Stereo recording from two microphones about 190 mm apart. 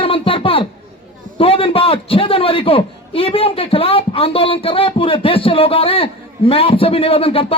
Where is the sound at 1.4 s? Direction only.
30° left (ahead or behind).